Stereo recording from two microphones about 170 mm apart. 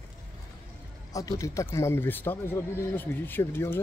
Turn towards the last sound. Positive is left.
turn(degrees=15)  # may be behind; listen again after turning